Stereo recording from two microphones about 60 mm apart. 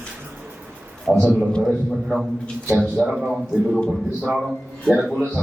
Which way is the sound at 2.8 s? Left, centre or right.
Centre.